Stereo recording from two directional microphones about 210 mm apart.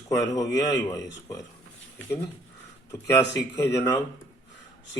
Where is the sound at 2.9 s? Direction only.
15° left (ahead or behind).